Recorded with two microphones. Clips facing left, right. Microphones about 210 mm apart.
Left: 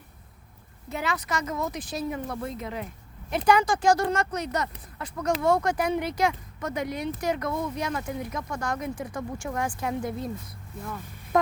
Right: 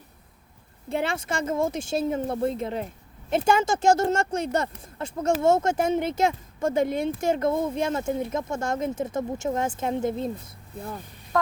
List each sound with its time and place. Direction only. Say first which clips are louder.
0.9 s speech: right 3 dB; 30° right (ahead or behind)